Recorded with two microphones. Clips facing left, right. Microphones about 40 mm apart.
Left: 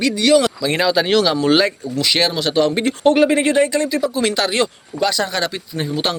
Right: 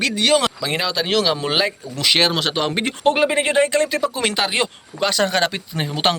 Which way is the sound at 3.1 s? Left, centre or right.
Centre.